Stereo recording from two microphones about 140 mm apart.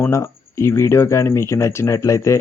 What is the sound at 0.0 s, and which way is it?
Speech, 20° left (ahead or behind).